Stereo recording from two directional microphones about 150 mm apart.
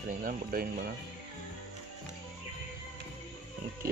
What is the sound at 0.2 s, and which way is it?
Speech, 75° right (ahead or behind).